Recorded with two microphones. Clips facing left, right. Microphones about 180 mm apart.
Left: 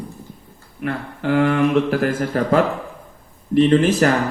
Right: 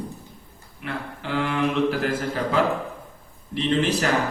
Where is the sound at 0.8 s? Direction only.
50° left (ahead or behind).